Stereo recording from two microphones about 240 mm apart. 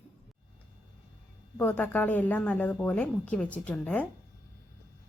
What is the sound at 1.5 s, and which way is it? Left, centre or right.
A woman's voice, centre.